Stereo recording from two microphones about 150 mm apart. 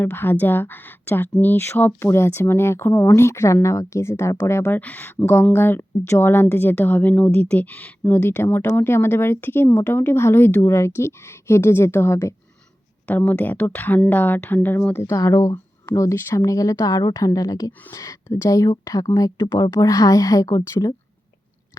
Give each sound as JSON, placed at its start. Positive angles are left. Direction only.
{"t": 0.0, "sound": "a woman's voice", "side_deg": 15}